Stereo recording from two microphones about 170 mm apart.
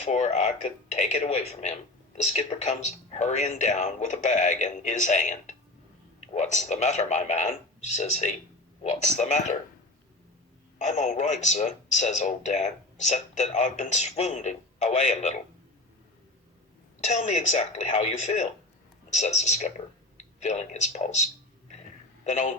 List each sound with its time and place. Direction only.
0.0 s a man's voice: 45° left (ahead or behind)
10.8 s speech: 45° left (ahead or behind)
17.0 s speech: 40° left (ahead or behind)
21.7 s a sound: 45° left (ahead or behind)